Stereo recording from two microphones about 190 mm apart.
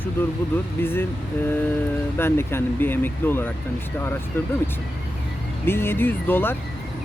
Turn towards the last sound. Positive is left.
turn(degrees=10)  # may be behind; listen again after turning